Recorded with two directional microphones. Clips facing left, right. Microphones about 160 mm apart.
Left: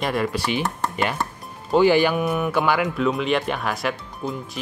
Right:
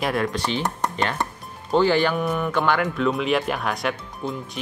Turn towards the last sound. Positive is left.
turn(degrees=0)  # may be behind; listen again after turning